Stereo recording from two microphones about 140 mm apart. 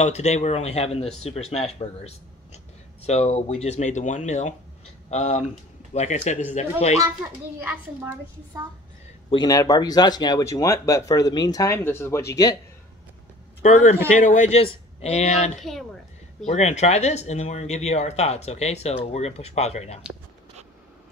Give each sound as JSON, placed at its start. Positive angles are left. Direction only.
{"t": 0.0, "sound": "speech", "side_deg": 55}
{"t": 9.3, "sound": "speech", "side_deg": 25}
{"t": 13.6, "sound": "speech", "side_deg": 55}
{"t": 14.6, "sound": "speech", "side_deg": 45}